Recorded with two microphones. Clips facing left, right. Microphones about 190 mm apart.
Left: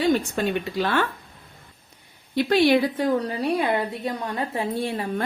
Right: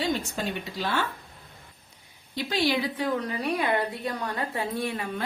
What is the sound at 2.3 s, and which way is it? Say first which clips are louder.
A woman's voice: left 8 dB; 60° left (ahead or behind).